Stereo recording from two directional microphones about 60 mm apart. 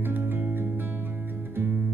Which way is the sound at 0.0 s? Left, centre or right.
Right.